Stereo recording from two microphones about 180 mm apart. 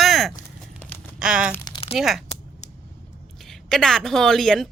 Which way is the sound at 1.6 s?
30° left (ahead or behind).